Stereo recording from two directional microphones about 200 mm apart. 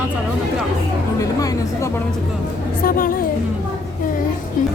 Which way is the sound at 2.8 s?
45° left (ahead or behind).